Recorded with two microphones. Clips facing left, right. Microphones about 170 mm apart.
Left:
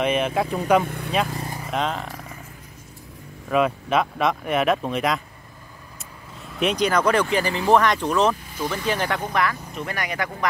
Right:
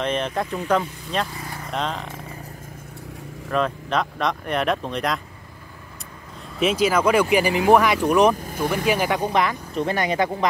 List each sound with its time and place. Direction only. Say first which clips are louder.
0.0 s speech: left 3 dB; 10° left (ahead or behind)
0.8 s speech: left 6 dB; 60° left (ahead or behind)
1.6 s speech: left 1 dB; 5° left (ahead or behind)
3.4 s speech: left 2 dB; 10° left (ahead or behind)
6.6 s speech: right 1 dB; 5° right (ahead or behind); by 10.5 s 25° right (ahead or behind)